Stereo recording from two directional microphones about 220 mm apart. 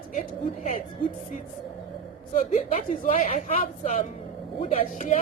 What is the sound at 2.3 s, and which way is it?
A woman's voice, 30° left (ahead or behind).